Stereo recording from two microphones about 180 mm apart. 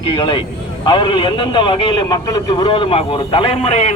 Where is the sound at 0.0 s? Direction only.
25° left (ahead or behind).